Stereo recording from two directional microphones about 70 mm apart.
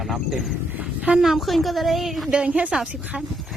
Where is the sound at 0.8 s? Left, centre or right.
Centre.